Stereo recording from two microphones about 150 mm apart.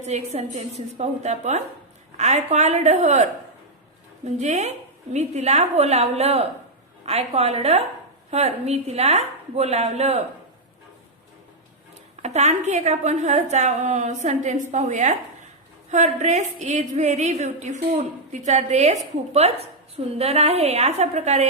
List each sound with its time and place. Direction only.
0.0 s a woman's voice: 45° right (ahead or behind)
12.2 s a woman's voice: 50° right (ahead or behind)